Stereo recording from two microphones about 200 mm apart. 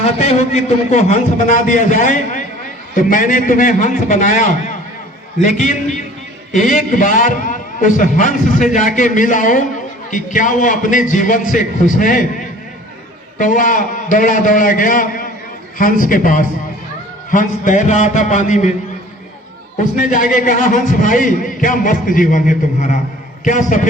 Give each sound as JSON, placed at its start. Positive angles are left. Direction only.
{"t": 0.0, "sound": "a man's voice", "side_deg": 35}
{"t": 13.4, "sound": "a man's voice", "side_deg": 40}
{"t": 19.8, "sound": "a man's voice", "side_deg": 40}